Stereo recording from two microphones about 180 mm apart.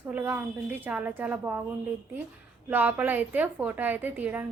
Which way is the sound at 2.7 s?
10° right (ahead or behind).